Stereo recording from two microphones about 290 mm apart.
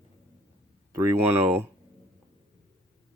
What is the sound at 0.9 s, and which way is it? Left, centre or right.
Speech, centre.